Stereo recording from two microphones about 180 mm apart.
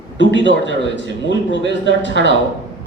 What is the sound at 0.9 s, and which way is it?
Speech, 85° left.